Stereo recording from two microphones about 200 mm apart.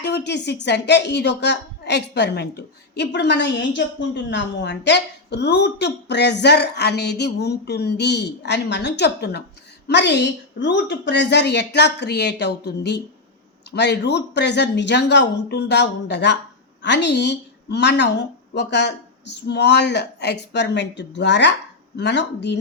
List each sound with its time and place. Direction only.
0.0 s a woman's voice: 55° left (ahead or behind)